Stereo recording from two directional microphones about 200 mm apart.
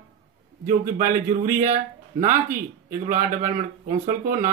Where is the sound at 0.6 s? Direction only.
45° right (ahead or behind).